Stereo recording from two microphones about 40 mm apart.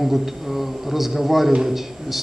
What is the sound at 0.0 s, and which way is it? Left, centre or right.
A man's voice, centre.